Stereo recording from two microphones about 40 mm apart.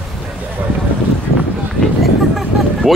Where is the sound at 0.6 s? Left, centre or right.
Right.